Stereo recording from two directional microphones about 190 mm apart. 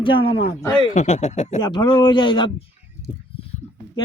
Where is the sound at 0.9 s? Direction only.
35° left (ahead or behind).